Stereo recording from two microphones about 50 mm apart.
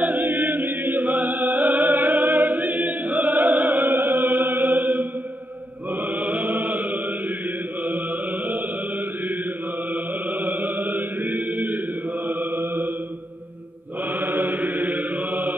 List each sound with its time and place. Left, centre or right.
0.0 s chant: right
6.0 s music: right
10.4 s mantra: right
14.2 s chant: right